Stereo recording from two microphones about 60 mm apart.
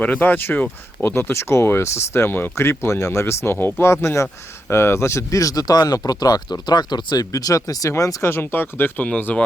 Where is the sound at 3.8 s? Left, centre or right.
Left.